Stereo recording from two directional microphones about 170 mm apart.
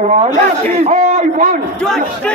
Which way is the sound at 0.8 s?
45° right (ahead or behind).